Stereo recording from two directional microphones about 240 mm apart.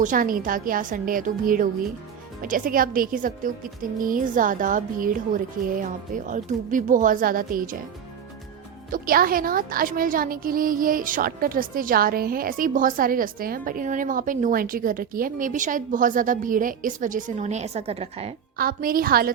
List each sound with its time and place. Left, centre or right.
0.0 s a woman's voice: right
8.9 s a woman's voice: right
18.5 s a woman's voice: right